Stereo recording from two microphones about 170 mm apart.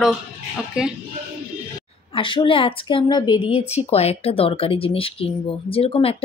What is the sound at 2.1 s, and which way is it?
A woman's voice, 30° left (ahead or behind).